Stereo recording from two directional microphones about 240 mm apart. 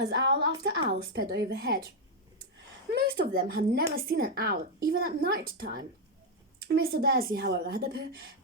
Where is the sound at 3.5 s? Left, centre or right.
Right.